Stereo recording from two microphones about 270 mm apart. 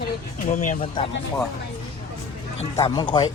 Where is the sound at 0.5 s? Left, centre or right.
Left.